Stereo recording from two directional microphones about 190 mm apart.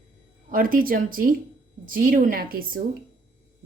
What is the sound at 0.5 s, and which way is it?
A woman's voice, 50° right (ahead or behind).